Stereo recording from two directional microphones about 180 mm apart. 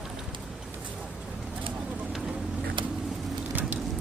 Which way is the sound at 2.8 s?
25° right (ahead or behind).